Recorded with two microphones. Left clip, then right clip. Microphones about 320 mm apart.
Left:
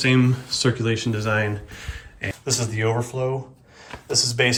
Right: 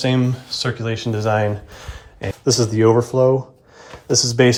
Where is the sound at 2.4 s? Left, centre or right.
Right.